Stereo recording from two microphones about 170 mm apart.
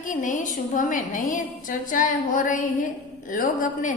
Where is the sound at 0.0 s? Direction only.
50° left (ahead or behind).